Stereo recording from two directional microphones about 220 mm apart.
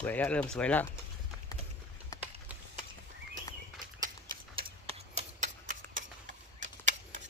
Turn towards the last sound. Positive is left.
turn(degrees=-35)  # may be behind; listen again after turning